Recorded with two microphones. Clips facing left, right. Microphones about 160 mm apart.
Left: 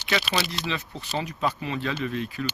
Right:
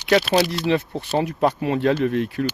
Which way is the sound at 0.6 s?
55° right (ahead or behind).